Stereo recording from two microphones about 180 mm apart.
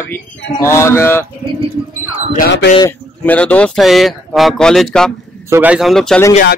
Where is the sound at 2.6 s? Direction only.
85° left.